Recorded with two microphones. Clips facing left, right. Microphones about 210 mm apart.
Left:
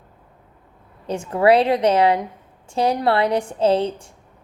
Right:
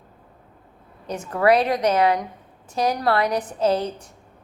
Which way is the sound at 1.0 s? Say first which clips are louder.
Left 3 dB; 30° left (ahead or behind).